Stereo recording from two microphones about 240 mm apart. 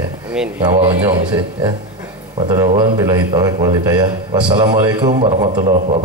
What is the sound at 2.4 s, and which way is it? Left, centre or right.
A man's voice, centre.